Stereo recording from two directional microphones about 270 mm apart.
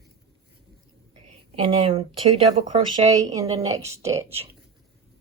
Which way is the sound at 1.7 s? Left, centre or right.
Centre.